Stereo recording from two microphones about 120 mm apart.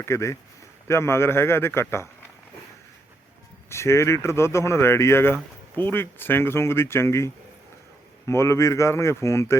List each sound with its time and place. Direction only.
0.0 s speech: 25° left (ahead or behind)
3.7 s speech: 20° left (ahead or behind)
8.3 s speech: 25° left (ahead or behind)